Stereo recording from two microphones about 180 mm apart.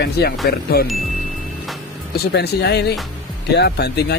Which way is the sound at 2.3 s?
65° left (ahead or behind).